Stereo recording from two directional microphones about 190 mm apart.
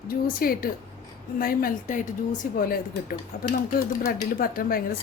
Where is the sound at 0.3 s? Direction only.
50° left (ahead or behind).